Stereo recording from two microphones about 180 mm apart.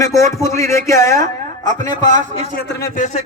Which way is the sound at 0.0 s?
15° left (ahead or behind).